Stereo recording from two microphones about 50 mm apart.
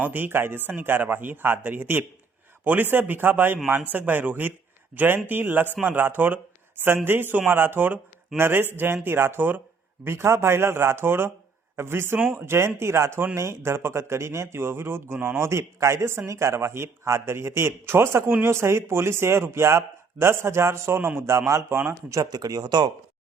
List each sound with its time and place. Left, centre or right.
0.0 s speech: right
10.0 s speech: right
15.4 s speech: right
16.3 s speech: right